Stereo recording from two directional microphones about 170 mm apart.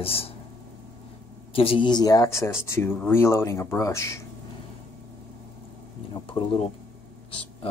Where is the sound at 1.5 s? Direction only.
35° left (ahead or behind); by 4.2 s 15° left (ahead or behind).